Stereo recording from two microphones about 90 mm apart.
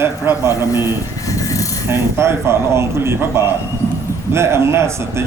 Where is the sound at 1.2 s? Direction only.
40° left (ahead or behind).